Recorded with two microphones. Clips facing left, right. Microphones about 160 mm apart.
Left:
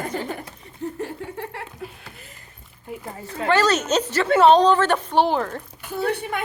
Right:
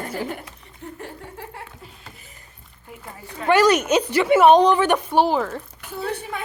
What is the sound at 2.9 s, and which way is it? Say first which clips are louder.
Speech: left 6 dB; 30° left (ahead or behind).